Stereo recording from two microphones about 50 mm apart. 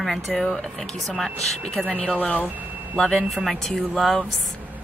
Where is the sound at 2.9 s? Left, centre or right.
Centre.